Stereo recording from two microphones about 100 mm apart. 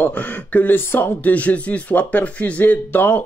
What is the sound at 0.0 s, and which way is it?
Speech, 15° left (ahead or behind).